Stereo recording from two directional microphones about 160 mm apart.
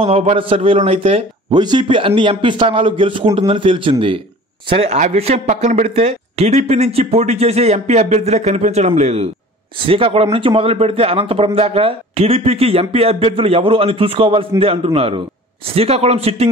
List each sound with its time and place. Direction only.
0.0 s a man's voice: 40° right (ahead or behind)